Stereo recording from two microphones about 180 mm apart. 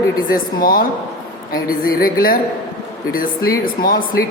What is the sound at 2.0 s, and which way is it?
Speech, 55° left (ahead or behind).